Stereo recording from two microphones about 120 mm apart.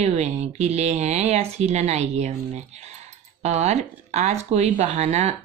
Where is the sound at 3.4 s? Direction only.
65° right (ahead or behind).